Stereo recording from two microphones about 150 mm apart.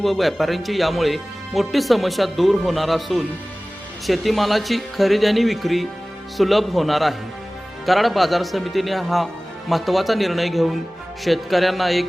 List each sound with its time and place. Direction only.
0.0 s speech: centre (ahead or behind)